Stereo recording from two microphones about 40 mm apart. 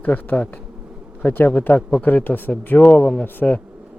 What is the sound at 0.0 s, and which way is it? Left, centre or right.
Speech, left.